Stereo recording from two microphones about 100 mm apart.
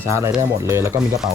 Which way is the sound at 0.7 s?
25° right (ahead or behind).